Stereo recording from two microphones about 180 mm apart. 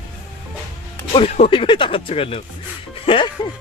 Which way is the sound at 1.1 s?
30° left (ahead or behind).